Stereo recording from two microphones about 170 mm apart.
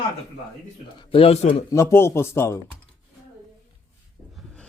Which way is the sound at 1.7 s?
15° left (ahead or behind).